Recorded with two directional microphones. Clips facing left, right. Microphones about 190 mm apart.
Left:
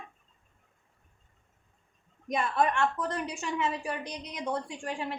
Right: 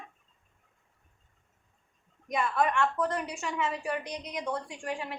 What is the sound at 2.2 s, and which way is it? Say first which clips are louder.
A woman's voice: left 1 dB; 30° left (ahead or behind).